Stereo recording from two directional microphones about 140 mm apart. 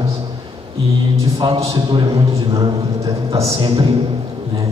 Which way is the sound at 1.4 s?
40° right (ahead or behind).